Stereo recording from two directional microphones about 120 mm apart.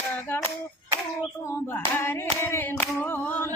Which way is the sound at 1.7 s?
20° left (ahead or behind).